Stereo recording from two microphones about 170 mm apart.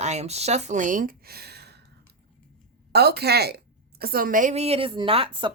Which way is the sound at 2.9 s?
70° right (ahead or behind).